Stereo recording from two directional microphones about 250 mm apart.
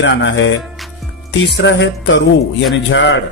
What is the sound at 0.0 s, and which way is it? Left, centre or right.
Speech, left.